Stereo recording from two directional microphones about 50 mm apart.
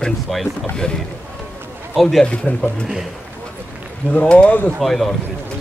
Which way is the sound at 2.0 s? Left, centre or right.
Centre.